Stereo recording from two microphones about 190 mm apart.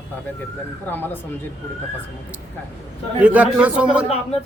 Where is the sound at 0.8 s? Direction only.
10° left (ahead or behind).